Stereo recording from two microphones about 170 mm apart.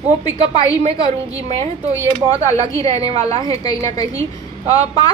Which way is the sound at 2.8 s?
35° right (ahead or behind).